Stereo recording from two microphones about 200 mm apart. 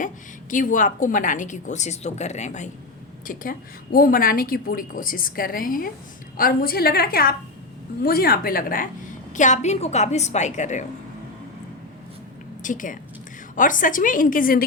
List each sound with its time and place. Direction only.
0.5 s a woman's voice: 40° left (ahead or behind)
12.6 s a woman's voice: 40° left (ahead or behind)